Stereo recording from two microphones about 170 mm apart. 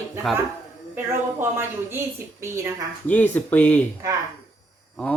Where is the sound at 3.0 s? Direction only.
10° left (ahead or behind).